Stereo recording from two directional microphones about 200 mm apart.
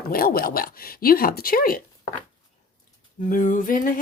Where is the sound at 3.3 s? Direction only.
40° left (ahead or behind).